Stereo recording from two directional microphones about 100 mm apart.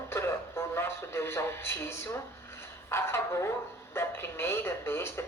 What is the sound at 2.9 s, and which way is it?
Speech, 25° left (ahead or behind).